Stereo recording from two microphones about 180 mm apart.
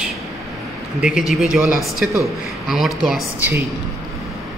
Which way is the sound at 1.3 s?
Centre (ahead or behind).